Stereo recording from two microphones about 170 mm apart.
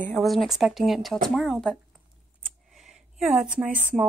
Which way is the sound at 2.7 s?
Centre (ahead or behind).